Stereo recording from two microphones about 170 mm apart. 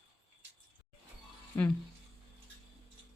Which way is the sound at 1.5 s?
15° left (ahead or behind).